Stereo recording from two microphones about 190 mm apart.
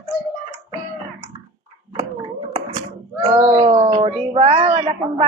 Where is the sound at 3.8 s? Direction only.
35° right (ahead or behind).